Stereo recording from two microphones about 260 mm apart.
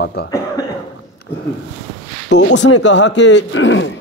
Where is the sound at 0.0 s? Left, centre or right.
Left.